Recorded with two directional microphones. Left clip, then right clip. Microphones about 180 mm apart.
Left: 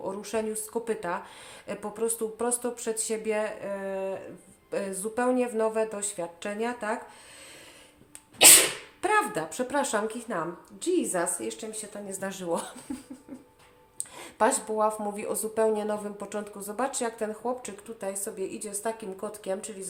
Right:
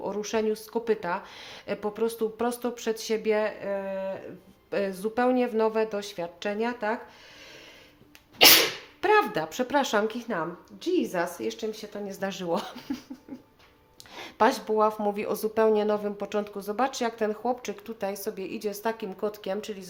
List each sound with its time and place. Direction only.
0.0 s speech: 35° right (ahead or behind)
9.0 s speech: 35° right (ahead or behind)
14.2 s speech: 35° right (ahead or behind)